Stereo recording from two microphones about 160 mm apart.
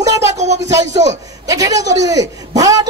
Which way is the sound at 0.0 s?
20° right (ahead or behind).